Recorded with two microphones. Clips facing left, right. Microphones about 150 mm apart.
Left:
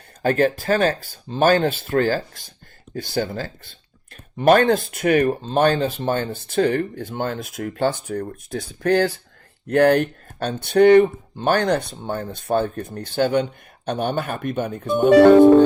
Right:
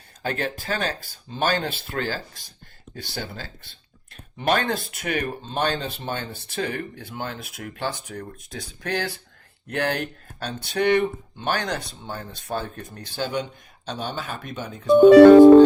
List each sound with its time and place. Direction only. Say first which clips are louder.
0.2 s speech: left 9 dB; 45° left (ahead or behind)